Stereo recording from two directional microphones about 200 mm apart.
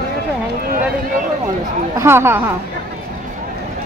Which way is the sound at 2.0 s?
10° right (ahead or behind).